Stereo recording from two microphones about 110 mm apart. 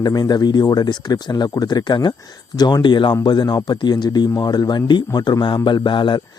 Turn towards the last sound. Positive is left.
turn(degrees=45)  # may be behind; listen again after turning